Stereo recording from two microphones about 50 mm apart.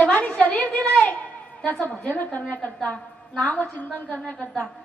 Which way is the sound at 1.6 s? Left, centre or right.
Left.